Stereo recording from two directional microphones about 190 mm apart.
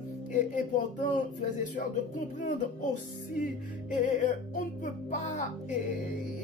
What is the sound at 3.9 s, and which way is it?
A woman's voice, 40° left (ahead or behind).